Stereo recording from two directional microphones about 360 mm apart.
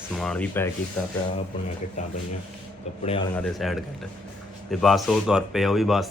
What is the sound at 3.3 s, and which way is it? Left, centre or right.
A man's voice, centre.